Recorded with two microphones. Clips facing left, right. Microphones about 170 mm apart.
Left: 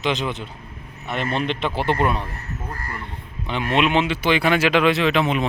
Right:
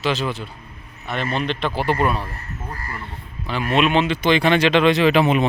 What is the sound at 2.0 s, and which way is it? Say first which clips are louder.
Speech: right 1 dB; 20° left (ahead or behind).